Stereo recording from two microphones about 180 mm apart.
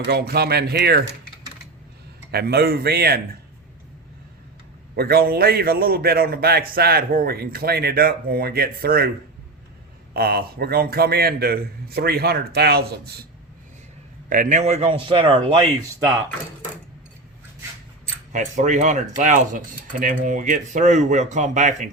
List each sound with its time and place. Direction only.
0.0 s a man's voice: 60° right (ahead or behind)
2.3 s a man's voice: 60° right (ahead or behind)
4.9 s a man's voice: 55° right (ahead or behind)
10.2 s a man's voice: 60° right (ahead or behind)
14.3 s speech: 45° right (ahead or behind)
18.3 s speech: 40° right (ahead or behind)